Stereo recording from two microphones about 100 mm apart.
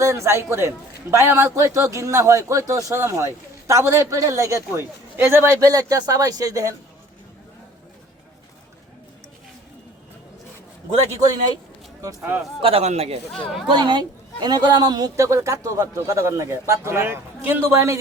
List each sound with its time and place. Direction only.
0.0 s a man's voice: 30° right (ahead or behind)
5.5 s a woman's voice: 40° right (ahead or behind)
12.6 s a man's voice: 85° right
13.7 s a woman's voice: 50° right (ahead or behind); by 17.9 s 25° right (ahead or behind)